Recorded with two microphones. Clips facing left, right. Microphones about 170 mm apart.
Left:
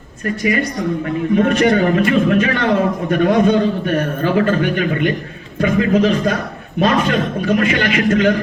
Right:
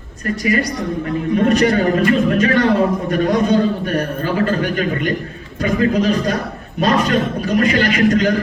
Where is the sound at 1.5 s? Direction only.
40° right (ahead or behind).